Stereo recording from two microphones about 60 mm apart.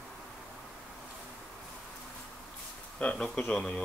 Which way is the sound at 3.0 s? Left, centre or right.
Centre.